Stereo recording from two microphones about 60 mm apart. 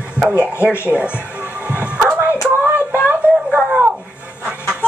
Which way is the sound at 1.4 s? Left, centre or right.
Right.